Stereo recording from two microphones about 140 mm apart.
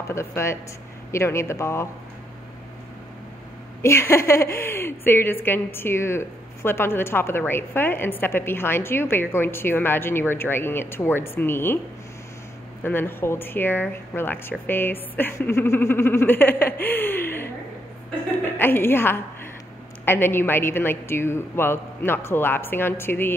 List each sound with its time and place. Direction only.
0.1 s speech: 20° left (ahead or behind)
3.8 s a woman's voice: 20° left (ahead or behind)
12.8 s a woman's voice: 15° left (ahead or behind)